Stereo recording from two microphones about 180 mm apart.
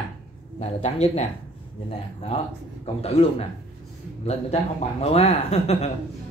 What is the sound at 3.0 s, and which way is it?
Speech, 35° left (ahead or behind).